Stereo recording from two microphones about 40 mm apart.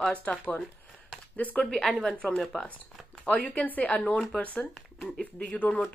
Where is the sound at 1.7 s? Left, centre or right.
Left.